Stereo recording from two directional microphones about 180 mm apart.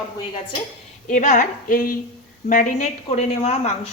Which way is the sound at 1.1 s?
45° left (ahead or behind).